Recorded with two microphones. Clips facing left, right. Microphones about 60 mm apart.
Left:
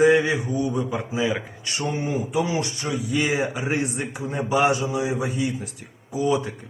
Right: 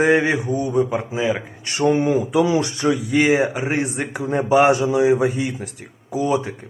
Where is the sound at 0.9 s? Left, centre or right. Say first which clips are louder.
Right 3 dB; right.